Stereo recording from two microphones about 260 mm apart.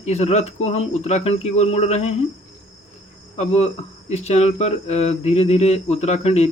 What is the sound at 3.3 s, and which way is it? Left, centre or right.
Speech, left.